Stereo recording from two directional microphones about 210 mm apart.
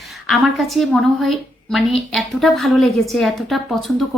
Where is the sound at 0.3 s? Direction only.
Centre (ahead or behind).